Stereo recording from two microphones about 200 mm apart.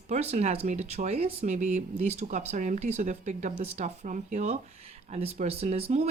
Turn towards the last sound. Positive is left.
turn(degrees=-30)  # may be behind; listen again after turning